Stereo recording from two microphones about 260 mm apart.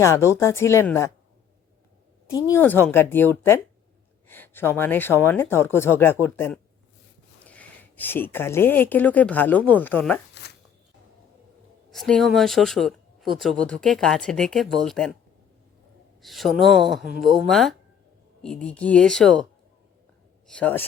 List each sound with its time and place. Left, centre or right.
0.0 s speech: centre
2.3 s speech: centre
10.4 s zipper: left
11.9 s speech: centre
16.2 s speech: centre
20.6 s speech: centre